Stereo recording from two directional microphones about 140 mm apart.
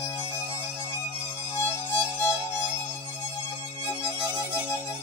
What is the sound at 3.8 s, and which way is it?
Music, 20° left (ahead or behind).